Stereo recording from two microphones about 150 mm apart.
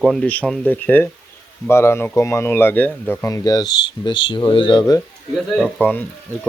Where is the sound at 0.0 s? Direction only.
5° left (ahead or behind); by 4.8 s 30° left (ahead or behind).